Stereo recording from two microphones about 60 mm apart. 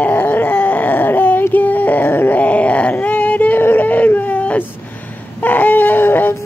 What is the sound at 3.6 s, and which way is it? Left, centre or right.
Whimper, left.